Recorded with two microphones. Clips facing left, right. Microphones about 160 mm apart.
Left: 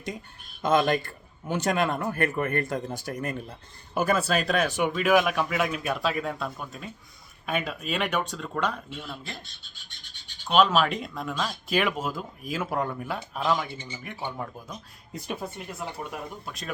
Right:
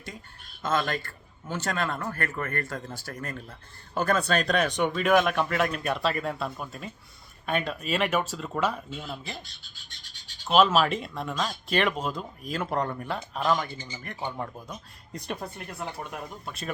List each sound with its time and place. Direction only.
0.6 s a man's voice: 15° left (ahead or behind); by 9.4 s 5° right (ahead or behind)
10.4 s speech: centre (ahead or behind)